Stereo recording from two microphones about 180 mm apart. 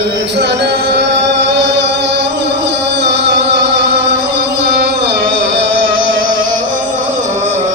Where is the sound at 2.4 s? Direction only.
70° right (ahead or behind).